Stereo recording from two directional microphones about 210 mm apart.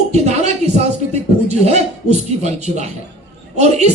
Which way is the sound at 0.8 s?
30° right (ahead or behind).